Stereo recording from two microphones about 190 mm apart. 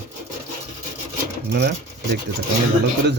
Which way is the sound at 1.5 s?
60° right (ahead or behind).